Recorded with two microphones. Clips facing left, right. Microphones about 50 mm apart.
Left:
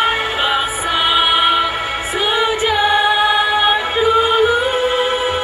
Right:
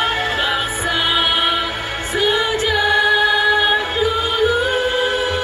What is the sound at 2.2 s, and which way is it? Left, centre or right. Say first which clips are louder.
A capella: left 1 dB; centre.